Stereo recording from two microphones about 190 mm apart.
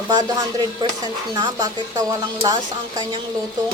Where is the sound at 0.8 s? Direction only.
25° right (ahead or behind).